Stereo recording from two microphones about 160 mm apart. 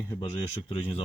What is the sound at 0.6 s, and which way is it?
Speech, 35° left (ahead or behind).